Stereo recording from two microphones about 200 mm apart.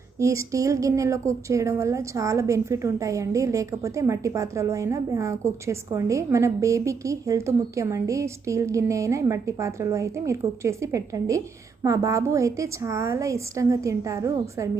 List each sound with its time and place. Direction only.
0.2 s a woman's voice: 15° right (ahead or behind)